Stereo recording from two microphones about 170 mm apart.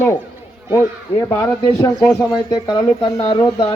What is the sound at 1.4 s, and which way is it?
Speech, 20° left (ahead or behind).